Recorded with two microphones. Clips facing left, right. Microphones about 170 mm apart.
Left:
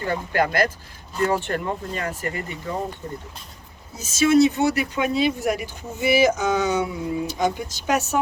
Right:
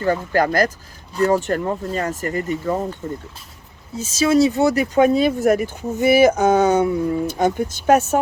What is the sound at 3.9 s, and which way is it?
Speech, 30° right (ahead or behind).